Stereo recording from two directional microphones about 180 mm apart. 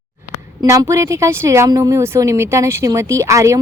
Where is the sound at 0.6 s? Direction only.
15° right (ahead or behind).